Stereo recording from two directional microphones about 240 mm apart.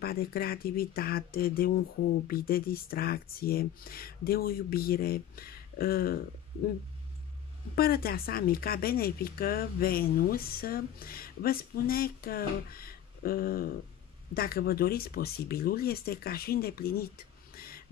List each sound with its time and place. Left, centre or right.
0.0 s speech: left
7.7 s speech: left
17.6 s snort: left